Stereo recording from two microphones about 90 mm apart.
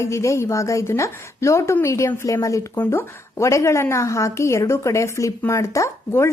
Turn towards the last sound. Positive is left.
turn(degrees=30)  # may be behind; listen again after turning